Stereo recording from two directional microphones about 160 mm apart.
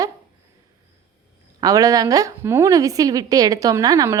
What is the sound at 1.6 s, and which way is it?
A woman's voice, 20° right (ahead or behind).